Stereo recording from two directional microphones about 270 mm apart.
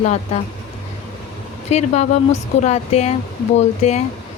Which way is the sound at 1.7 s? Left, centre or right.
Left.